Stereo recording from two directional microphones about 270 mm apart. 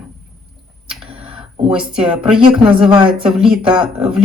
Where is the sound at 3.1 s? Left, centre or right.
Centre.